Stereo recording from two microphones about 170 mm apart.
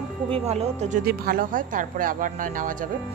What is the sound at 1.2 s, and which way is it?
A woman's voice, 55° right (ahead or behind).